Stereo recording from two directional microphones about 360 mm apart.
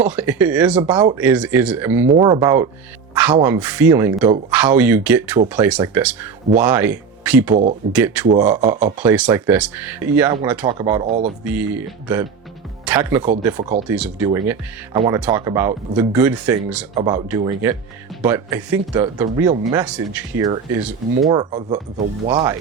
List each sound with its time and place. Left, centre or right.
0.0 s speech: centre
9.0 s speech: centre
16.9 s speech: centre